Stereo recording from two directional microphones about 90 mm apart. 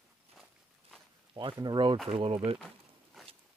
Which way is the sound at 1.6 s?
60° right (ahead or behind).